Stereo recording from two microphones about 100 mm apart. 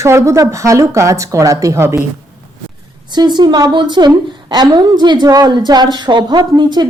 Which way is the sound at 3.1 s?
45° right (ahead or behind).